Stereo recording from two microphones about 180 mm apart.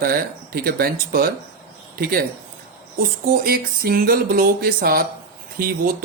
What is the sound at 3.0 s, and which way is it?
Speech, 55° right (ahead or behind).